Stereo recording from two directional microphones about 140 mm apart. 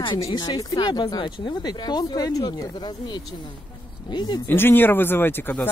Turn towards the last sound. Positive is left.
turn(degrees=15)  # may be behind; listen again after turning